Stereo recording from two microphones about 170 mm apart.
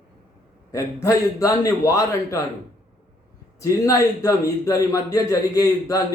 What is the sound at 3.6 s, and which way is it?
A man's voice, 20° left (ahead or behind).